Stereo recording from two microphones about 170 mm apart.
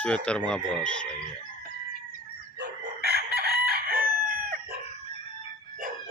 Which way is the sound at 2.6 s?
75° right (ahead or behind).